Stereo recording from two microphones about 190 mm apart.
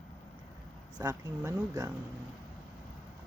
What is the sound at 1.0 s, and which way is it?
Speech, 20° right (ahead or behind).